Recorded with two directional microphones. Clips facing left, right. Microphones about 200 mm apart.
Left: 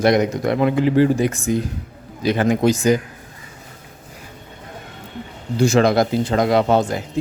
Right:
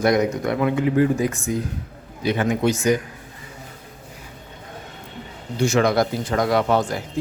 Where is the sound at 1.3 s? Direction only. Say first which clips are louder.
Left 4 dB; 90° left.